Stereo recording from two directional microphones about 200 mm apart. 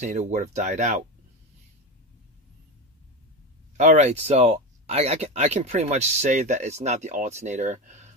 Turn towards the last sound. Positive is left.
turn(degrees=-35)  # may be behind; listen again after turning